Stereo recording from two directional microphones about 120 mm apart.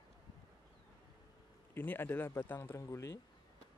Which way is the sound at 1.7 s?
20° left (ahead or behind).